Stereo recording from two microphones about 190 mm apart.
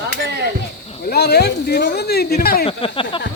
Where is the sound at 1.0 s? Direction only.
55° left (ahead or behind).